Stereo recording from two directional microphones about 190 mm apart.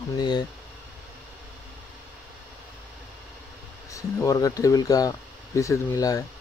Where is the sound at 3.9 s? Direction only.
15° left (ahead or behind).